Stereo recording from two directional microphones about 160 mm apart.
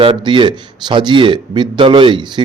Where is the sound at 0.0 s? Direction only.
30° right (ahead or behind).